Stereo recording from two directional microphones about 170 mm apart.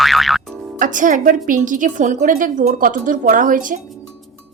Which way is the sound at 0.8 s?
50° right (ahead or behind).